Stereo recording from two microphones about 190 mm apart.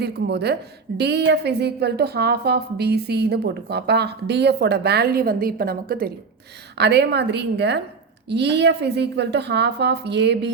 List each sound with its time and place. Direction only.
0.0 s a woman's voice: 60° right (ahead or behind)